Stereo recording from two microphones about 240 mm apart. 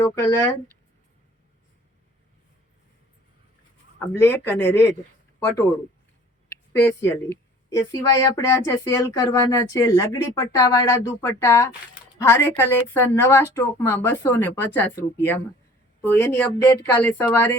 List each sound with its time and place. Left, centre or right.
0.0 s speech: centre
4.1 s speech: centre
6.8 s speech: centre